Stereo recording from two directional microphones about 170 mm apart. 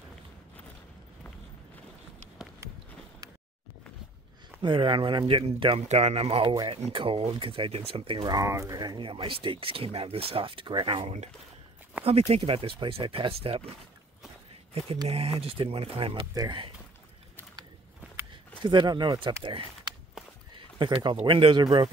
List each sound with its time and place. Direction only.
4.6 s speech: 30° right (ahead or behind)
8.4 s speech: 20° right (ahead or behind); by 13.7 s 35° right (ahead or behind)
14.9 s speech: 35° right (ahead or behind)
18.6 s speech: 25° right (ahead or behind)
20.5 s speech: 30° right (ahead or behind)